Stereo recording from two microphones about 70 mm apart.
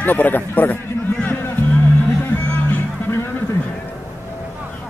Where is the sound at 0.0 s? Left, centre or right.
Left.